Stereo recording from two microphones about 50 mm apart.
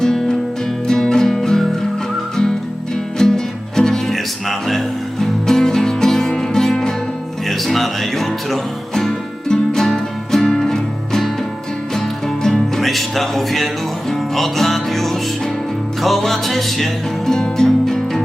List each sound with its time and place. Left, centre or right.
0.0 s music: centre
3.2 s music: centre